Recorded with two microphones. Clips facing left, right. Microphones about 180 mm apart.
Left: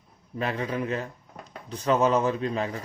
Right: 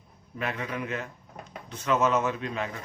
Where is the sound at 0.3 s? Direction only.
35° left (ahead or behind).